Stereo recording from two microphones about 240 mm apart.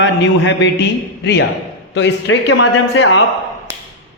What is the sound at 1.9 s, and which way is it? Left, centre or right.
A man's voice, left.